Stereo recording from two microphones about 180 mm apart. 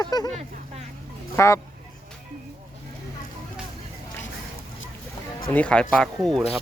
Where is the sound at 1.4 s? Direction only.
15° left (ahead or behind).